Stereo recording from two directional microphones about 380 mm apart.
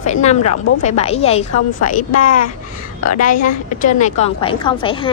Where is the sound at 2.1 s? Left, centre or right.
Left.